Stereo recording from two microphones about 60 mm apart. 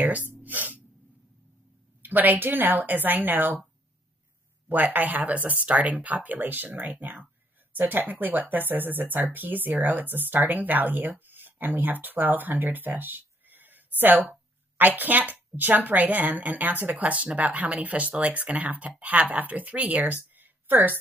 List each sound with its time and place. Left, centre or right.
0.0 s gasp: right
0.4 s a sound: right
2.0 s speech: right
4.6 s speech: right